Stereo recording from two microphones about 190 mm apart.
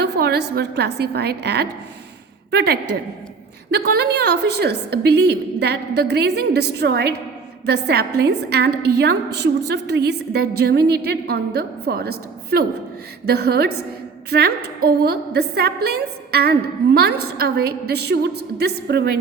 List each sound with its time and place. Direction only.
0.0 s a woman's voice: 60° right (ahead or behind)